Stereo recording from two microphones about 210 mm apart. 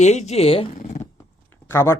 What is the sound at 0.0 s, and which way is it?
Speech, 30° left (ahead or behind).